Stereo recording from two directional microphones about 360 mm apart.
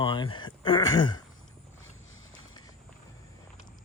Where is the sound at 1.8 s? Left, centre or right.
Left.